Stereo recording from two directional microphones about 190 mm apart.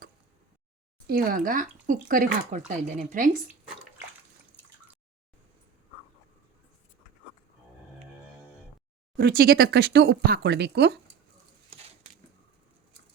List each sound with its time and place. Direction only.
1.0 s speech: 50° right (ahead or behind)
9.1 s speech: 50° right (ahead or behind)